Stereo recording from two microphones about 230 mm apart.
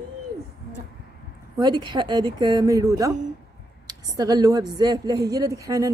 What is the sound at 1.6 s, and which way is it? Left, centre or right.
A woman's voice, centre.